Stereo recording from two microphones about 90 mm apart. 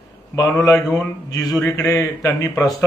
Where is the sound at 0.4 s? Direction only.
35° left (ahead or behind).